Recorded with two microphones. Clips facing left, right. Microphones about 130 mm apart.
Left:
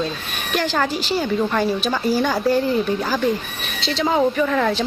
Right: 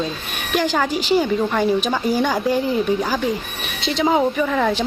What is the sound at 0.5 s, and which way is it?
Speech, 10° right (ahead or behind).